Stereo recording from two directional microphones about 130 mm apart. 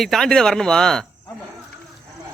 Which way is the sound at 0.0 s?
5° left (ahead or behind).